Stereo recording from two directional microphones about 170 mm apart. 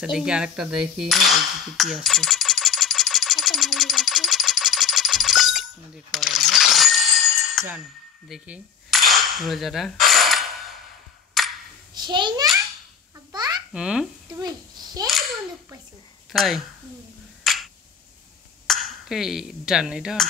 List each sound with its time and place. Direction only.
0.0 s cutlery: 5° right (ahead or behind)
6.1 s coin: centre (ahead or behind)
8.3 s cap gun: centre (ahead or behind)
11.4 s a sound: centre (ahead or behind)
11.9 s a child's voice: 25° right (ahead or behind)
13.3 s babbling: 25° right (ahead or behind)
13.7 s speech: 5° right (ahead or behind)
14.3 s a child's voice: 25° right (ahead or behind)
15.0 s a child's voice: centre (ahead or behind)
17.4 s a sound: centre (ahead or behind)
18.7 s speech: centre (ahead or behind)